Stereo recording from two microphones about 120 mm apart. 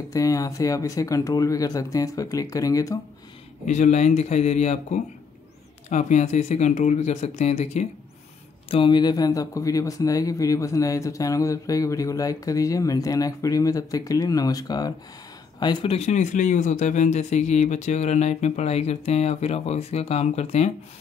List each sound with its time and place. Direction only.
0.1 s speech: 30° left (ahead or behind)
3.6 s speech: 75° left (ahead or behind)
5.9 s speech: 80° left; by 7.8 s 65° left (ahead or behind)
8.6 s speech: 45° left (ahead or behind)
15.9 s speech: 70° left (ahead or behind)